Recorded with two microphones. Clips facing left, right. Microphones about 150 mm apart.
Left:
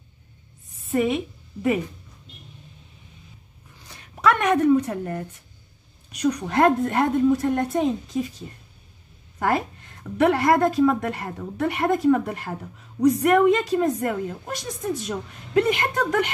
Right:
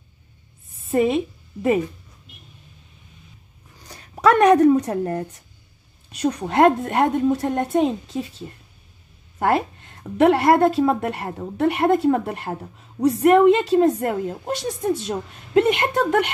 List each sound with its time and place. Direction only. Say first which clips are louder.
1.0 s a woman's voice: right 4 dB; 40° right (ahead or behind)
3.8 s a sound: right 4 dB; 40° right (ahead or behind)
6.1 s a woman's voice: right 2 dB; 25° right (ahead or behind)